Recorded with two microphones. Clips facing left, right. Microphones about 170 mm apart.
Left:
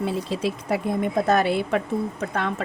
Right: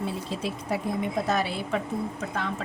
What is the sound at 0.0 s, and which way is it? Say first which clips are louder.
Speech: left 6 dB; 80° left.